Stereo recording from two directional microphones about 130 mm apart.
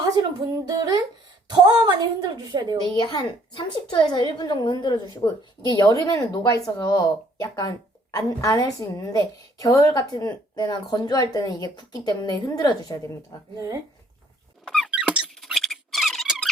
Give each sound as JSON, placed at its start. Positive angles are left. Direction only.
{"t": 0.2, "sound": "music", "side_deg": -30}
{"t": 1.5, "sound": "speech", "side_deg": -35}
{"t": 2.9, "sound": "a woman's voice", "side_deg": 35}
{"t": 14.8, "sound": "squeak", "side_deg": -10}